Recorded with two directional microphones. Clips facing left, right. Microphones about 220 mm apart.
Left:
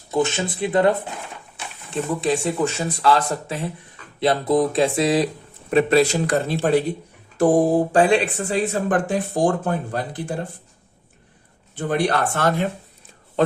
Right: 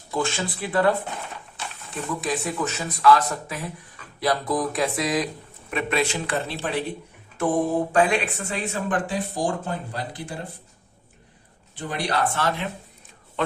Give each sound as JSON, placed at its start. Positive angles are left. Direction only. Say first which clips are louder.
{"t": 0.1, "sound": "speech", "louder": "left 5 dB", "side_deg": 20}
{"t": 7.3, "sound": "speech", "louder": "left 6 dB", "side_deg": 35}
{"t": 11.7, "sound": "speech", "louder": "left 6 dB", "side_deg": 50}